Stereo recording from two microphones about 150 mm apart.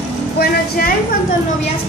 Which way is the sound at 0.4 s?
85° left.